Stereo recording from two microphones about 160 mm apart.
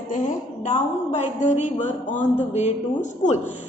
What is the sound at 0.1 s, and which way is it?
A woman's voice, 50° left (ahead or behind).